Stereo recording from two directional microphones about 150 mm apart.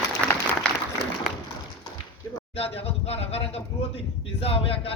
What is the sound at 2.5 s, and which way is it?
Speech, 40° left (ahead or behind).